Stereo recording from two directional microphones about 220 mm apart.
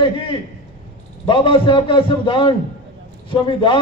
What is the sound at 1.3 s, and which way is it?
Speech, 20° left (ahead or behind).